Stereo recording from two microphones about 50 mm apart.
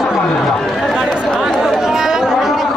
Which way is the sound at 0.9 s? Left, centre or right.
Centre.